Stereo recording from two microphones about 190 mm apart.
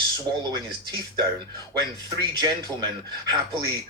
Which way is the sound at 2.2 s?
20° right (ahead or behind).